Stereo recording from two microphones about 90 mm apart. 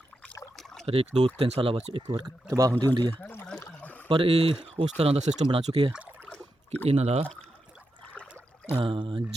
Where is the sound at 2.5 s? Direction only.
40° right (ahead or behind).